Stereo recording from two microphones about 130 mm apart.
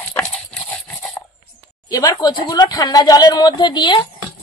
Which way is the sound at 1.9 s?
30° left (ahead or behind).